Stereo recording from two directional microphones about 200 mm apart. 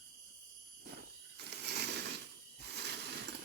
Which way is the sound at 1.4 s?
55° right (ahead or behind).